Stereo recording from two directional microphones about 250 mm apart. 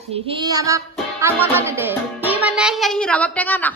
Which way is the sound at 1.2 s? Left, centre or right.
Centre.